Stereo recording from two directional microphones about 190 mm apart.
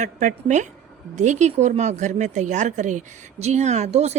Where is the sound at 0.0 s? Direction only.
40° right (ahead or behind).